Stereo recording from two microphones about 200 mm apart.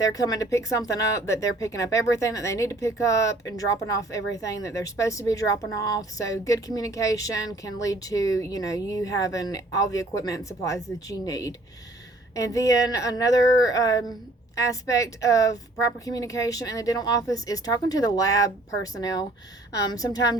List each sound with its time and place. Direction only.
0.0 s speech: 15° left (ahead or behind)